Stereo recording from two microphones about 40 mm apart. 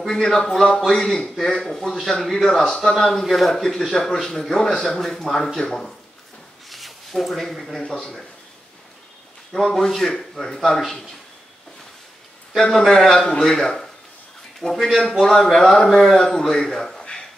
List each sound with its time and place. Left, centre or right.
0.0 s speech: centre
6.7 s a sound: centre
7.8 s speech: centre
9.5 s a man's voice: centre
12.5 s speech: centre